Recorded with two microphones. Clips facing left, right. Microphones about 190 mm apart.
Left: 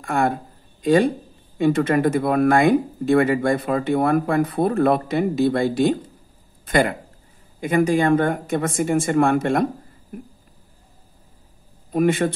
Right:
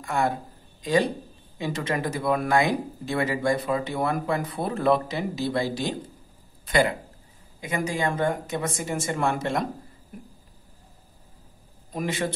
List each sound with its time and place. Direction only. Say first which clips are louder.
0.0 s a man's voice: left 4 dB; 55° left (ahead or behind)
11.9 s speech: left 10 dB; 60° left (ahead or behind)